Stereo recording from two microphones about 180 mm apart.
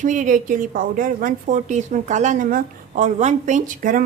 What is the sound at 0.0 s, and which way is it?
A woman's voice, 45° right (ahead or behind).